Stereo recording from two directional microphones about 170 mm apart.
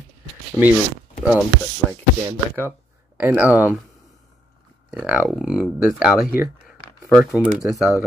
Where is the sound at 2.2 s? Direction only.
10° right (ahead or behind).